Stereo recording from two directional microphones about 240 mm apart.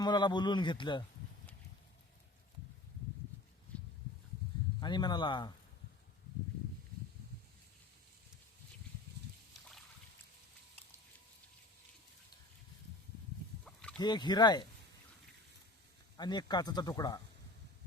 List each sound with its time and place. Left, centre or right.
0.0 s a man's voice: centre
4.8 s speech: centre
13.7 s rowboat: centre
14.0 s speech: centre
16.1 s speech: centre